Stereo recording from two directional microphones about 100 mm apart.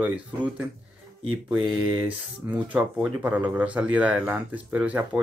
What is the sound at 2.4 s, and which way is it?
Speech, 25° right (ahead or behind).